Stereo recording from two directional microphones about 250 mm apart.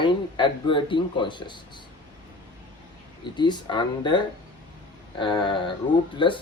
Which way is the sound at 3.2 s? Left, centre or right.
Centre.